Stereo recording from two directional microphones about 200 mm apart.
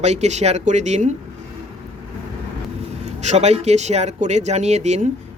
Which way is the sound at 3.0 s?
35° right (ahead or behind).